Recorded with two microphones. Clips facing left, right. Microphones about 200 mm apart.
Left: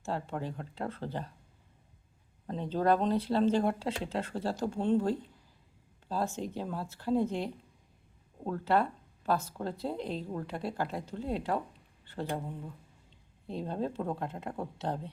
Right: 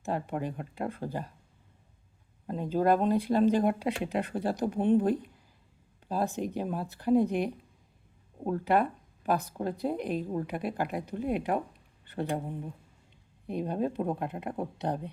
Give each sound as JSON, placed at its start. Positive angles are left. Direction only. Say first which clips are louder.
{"t": 0.0, "sound": "speech", "louder": "right 3 dB", "side_deg": -15}
{"t": 2.5, "sound": "speech", "louder": "right 2 dB", "side_deg": -10}